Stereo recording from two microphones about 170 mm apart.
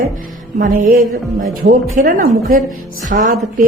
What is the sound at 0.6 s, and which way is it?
A woman's voice, 50° right (ahead or behind).